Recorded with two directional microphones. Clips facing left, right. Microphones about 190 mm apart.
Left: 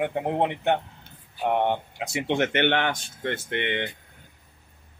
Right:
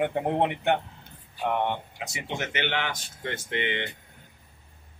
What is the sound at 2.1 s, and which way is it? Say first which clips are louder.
Speech: left 9 dB; 65° left (ahead or behind).